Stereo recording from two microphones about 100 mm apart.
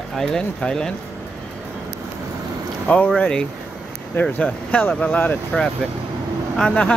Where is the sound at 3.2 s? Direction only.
10° left (ahead or behind).